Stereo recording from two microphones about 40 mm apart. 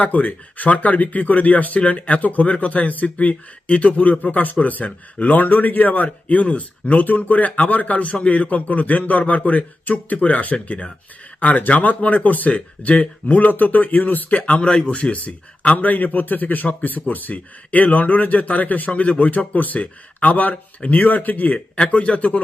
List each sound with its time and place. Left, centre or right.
0.0 s a man's voice: left
14.6 s a man's voice: left
21.5 s speech: left